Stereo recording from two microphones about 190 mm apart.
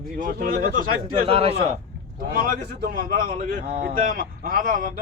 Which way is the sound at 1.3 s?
30° right (ahead or behind).